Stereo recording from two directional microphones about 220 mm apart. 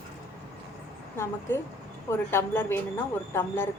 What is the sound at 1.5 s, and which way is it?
A woman's voice, 10° left (ahead or behind).